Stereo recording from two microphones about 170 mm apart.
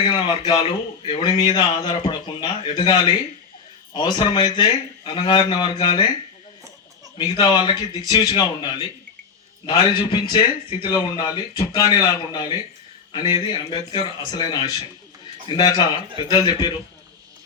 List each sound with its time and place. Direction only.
0.1 s speech: 25° left (ahead or behind)
7.2 s speech: 25° left (ahead or behind)